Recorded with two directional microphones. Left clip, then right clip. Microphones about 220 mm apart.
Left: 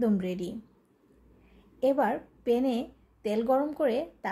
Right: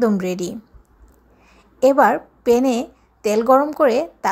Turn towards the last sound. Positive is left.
turn(degrees=-20)  # may be behind; listen again after turning